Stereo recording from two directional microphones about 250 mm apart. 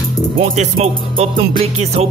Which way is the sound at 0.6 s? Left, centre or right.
Right.